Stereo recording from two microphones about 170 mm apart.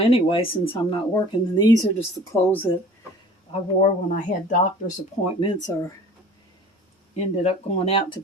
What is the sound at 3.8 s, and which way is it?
Speech, 50° left (ahead or behind).